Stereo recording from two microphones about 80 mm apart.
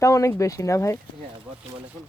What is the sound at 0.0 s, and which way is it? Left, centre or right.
Speech, left.